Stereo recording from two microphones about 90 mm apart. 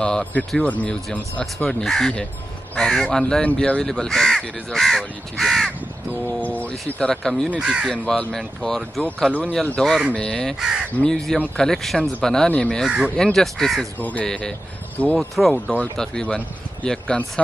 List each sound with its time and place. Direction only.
0.0 s speech: 10° left (ahead or behind)
6.2 s speech: 15° left (ahead or behind)
7.4 s speech: 10° right (ahead or behind)
7.9 s speech: 10° left (ahead or behind)
10.6 s speech: 5° right (ahead or behind)
11.0 s speech: 5° left (ahead or behind)
12.8 s speech: 10° right (ahead or behind)
13.1 s speech: 5° left (ahead or behind)
13.9 s speech: 20° left (ahead or behind)
14.2 s speech: 5° left (ahead or behind)